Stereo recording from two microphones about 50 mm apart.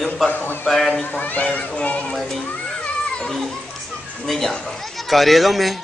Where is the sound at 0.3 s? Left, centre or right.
Left.